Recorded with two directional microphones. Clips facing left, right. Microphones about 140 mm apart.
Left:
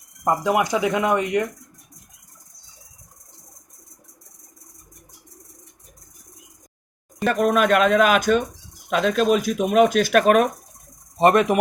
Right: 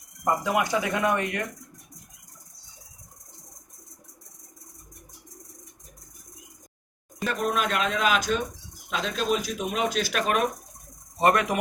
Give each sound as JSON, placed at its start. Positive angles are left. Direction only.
{"t": 0.4, "sound": "speech", "side_deg": 20}
{"t": 7.3, "sound": "speech", "side_deg": 60}
{"t": 11.2, "sound": "speech", "side_deg": 25}